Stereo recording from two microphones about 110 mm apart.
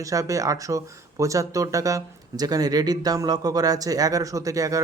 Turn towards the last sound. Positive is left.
turn(degrees=-30)  # may be behind; listen again after turning